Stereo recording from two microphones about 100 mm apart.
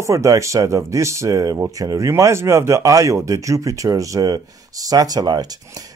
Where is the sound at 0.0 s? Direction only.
30° right (ahead or behind).